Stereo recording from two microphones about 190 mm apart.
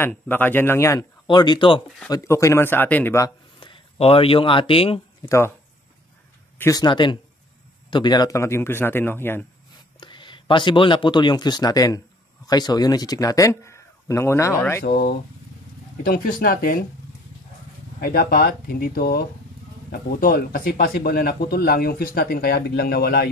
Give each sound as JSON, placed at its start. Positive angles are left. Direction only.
{"t": 0.0, "sound": "speech", "side_deg": 10}
{"t": 3.5, "sound": "speech", "side_deg": 25}
{"t": 6.6, "sound": "speech", "side_deg": 20}
{"t": 9.9, "sound": "speech", "side_deg": 25}
{"t": 14.8, "sound": "speech", "side_deg": 55}
{"t": 18.0, "sound": "speech", "side_deg": 50}